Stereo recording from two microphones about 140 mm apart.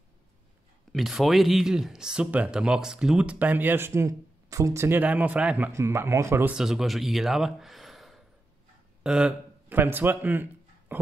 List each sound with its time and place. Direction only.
0.9 s speech: centre (ahead or behind)
5.7 s speech: 20° right (ahead or behind)
6.5 s a man's voice: 5° right (ahead or behind)